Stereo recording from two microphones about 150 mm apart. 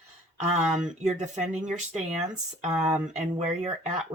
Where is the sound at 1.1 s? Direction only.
50° right (ahead or behind).